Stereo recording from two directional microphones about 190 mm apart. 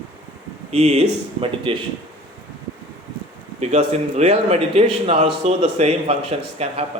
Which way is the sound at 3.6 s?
35° right (ahead or behind).